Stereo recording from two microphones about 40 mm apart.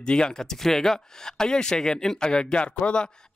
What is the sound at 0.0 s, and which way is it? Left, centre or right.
Speech, left.